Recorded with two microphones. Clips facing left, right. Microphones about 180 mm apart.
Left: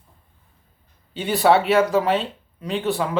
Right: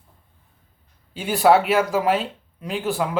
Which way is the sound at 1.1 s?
Centre (ahead or behind).